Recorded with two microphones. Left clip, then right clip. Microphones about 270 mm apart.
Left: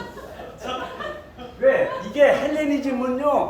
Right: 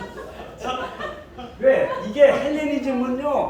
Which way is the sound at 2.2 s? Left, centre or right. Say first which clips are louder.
Right 1 dB; centre.